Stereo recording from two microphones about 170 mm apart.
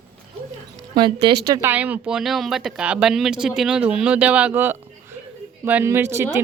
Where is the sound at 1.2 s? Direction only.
75° right (ahead or behind).